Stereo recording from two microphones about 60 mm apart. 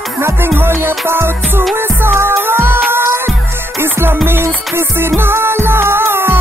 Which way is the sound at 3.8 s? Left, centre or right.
Right.